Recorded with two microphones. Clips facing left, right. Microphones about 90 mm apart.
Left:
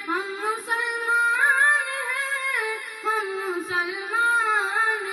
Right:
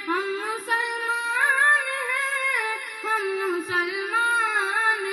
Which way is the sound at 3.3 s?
Centre (ahead or behind).